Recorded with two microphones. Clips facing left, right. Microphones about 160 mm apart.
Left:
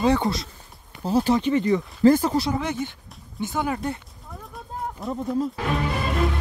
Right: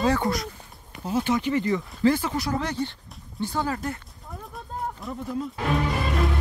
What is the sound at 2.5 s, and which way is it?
Speech, 15° left (ahead or behind).